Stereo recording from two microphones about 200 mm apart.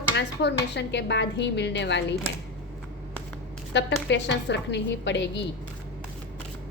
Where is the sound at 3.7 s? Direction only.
60° left (ahead or behind).